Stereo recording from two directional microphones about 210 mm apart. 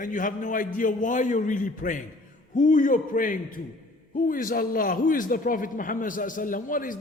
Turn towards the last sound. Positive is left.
turn(degrees=40)  # may be behind; listen again after turning